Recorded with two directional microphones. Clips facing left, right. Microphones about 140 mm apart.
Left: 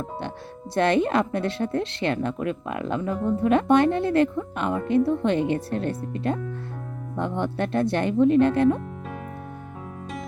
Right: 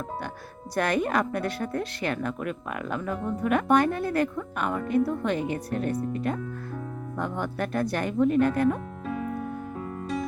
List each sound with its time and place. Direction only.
0.7 s a woman's voice: 25° left (ahead or behind)